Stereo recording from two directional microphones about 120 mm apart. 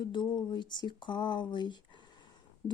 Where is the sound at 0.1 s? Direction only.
40° left (ahead or behind).